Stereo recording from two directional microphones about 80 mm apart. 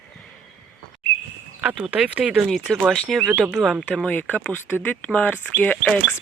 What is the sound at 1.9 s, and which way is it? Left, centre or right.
Speech, centre.